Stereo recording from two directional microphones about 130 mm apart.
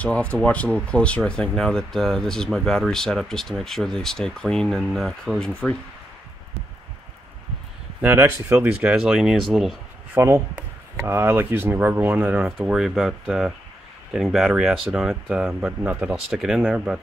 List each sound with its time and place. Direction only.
0.0 s speech: 10° left (ahead or behind)
8.0 s speech: 15° right (ahead or behind)
10.1 s speech: 25° right (ahead or behind)
12.6 s speech: 5° right (ahead or behind)